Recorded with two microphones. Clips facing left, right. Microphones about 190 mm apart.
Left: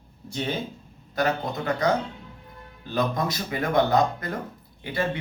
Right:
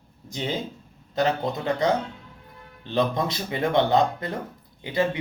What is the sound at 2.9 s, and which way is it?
Speech, 25° right (ahead or behind).